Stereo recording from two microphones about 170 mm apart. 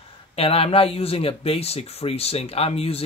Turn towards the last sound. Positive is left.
turn(degrees=35)  # may be behind; listen again after turning